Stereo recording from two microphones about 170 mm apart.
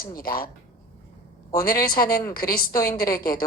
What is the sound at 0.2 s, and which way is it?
Speech, 60° left (ahead or behind).